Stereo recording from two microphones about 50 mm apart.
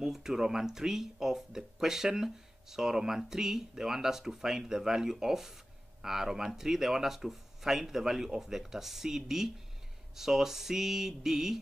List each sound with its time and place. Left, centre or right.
0.0 s speech: centre